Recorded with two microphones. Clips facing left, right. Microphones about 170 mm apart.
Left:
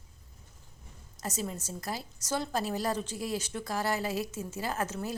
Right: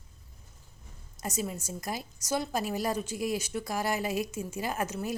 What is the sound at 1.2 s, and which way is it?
A woman's voice, 10° right (ahead or behind).